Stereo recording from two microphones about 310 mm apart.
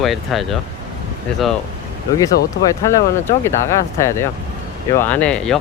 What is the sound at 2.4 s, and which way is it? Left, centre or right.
Speech, left.